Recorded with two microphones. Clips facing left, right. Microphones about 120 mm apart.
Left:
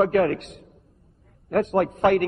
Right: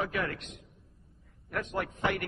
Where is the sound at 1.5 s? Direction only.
50° left (ahead or behind).